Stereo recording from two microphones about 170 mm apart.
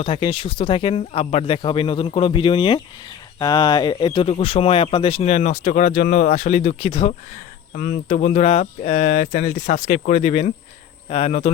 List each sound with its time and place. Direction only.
0.0 s speech: 30° left (ahead or behind)
7.8 s speech: 50° left (ahead or behind)